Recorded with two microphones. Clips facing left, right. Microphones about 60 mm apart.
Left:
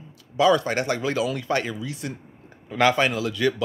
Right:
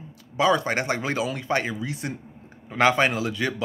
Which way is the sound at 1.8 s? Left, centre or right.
Right.